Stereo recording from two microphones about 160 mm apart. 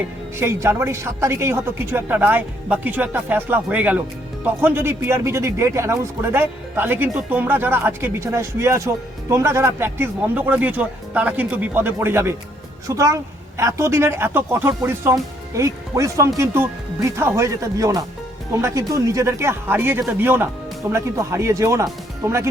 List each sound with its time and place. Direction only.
0.3 s a man's voice: 15° right (ahead or behind)